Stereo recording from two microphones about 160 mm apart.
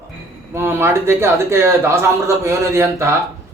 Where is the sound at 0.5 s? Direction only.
15° right (ahead or behind).